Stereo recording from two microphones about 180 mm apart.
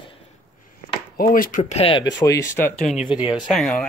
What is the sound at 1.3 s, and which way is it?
Speech, 50° left (ahead or behind).